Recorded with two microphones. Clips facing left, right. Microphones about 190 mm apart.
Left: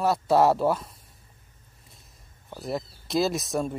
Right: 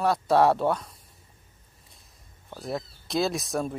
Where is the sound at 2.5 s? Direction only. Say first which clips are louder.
Left 1 dB; centre (ahead or behind).